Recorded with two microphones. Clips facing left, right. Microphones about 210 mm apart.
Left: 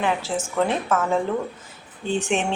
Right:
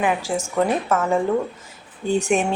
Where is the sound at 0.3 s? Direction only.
10° right (ahead or behind).